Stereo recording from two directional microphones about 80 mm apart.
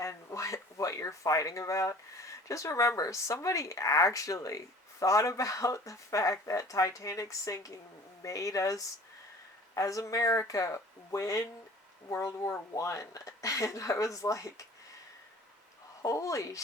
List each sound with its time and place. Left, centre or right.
0.0 s speech: left
16.0 s speech: left